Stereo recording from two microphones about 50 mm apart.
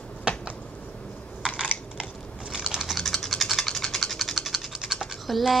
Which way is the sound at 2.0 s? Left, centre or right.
Centre.